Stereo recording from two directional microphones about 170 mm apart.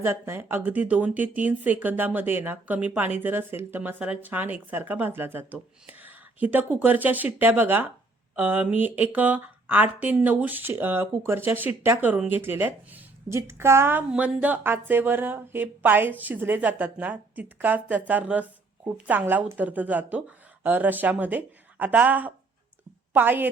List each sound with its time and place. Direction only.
0.0 s speech: 15° right (ahead or behind)